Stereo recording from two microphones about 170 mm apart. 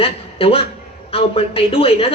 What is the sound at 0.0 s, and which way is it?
A man's voice, 35° left (ahead or behind).